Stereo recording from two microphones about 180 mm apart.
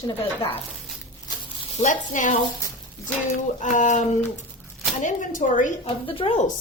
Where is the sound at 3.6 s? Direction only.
45° left (ahead or behind).